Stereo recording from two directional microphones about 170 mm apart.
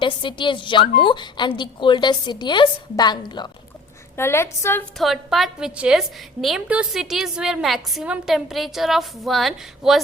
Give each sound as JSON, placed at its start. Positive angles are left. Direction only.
{"t": 0.0, "sound": "a woman's voice", "side_deg": 30}
{"t": 4.2, "sound": "a woman's voice", "side_deg": 15}
{"t": 4.9, "sound": "a woman's voice", "side_deg": 0}